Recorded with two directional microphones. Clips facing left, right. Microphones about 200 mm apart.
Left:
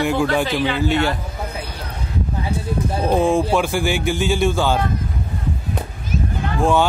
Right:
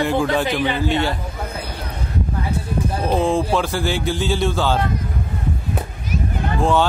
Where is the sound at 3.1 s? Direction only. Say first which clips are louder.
Left 2 dB; 10° left (ahead or behind).